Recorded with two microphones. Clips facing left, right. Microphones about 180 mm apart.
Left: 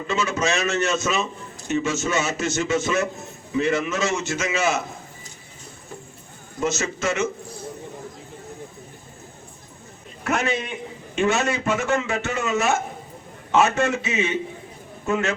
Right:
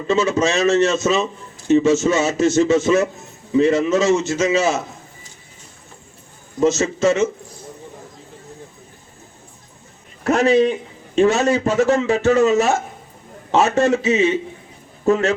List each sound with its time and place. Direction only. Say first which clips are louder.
0.1 s a man's voice: right 6 dB; 35° right (ahead or behind)
6.6 s a man's voice: right 8 dB; 35° right (ahead or behind)
10.2 s a man's voice: right 10 dB; 35° right (ahead or behind)